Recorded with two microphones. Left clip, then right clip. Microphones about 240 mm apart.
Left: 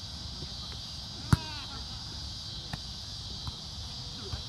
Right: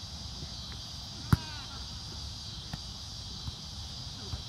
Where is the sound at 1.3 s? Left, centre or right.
Centre.